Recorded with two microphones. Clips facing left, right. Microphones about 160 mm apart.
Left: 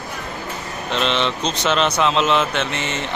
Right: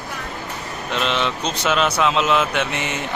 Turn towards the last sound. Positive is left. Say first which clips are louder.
# even
turn(degrees=-15)  # may be behind; listen again after turning